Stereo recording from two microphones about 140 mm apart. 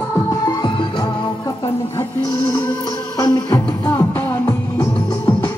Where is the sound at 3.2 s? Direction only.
25° left (ahead or behind).